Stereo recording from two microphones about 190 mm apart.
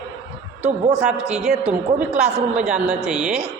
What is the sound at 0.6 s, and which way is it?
Speech, 35° right (ahead or behind).